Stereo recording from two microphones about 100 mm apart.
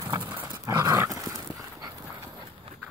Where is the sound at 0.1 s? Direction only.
50° right (ahead or behind).